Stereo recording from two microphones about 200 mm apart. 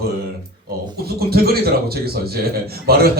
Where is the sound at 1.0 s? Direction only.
50° right (ahead or behind).